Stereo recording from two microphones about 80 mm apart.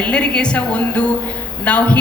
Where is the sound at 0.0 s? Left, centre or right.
Centre.